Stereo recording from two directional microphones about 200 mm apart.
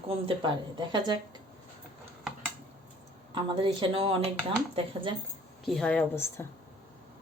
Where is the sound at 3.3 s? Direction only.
25° right (ahead or behind).